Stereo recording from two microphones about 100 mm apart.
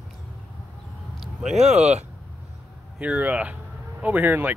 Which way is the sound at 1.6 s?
90° right.